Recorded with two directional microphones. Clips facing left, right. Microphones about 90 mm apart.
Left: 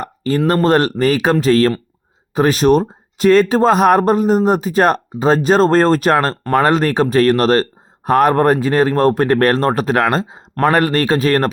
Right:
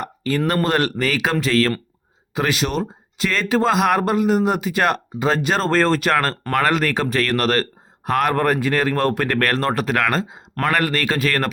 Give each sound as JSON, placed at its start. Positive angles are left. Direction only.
{"t": 0.0, "sound": "speech", "side_deg": 35}